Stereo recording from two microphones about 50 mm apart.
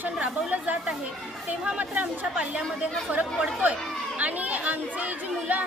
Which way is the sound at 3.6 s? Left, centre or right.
Right.